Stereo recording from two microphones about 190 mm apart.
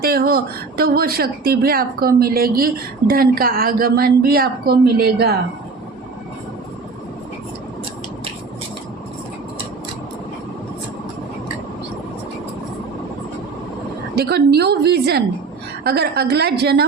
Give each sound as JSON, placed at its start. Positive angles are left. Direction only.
{"t": 0.0, "sound": "speech", "side_deg": -55}
{"t": 14.2, "sound": "a woman's voice", "side_deg": -60}